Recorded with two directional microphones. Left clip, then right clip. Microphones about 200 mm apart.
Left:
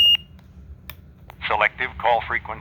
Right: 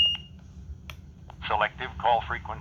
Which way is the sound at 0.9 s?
20° left (ahead or behind).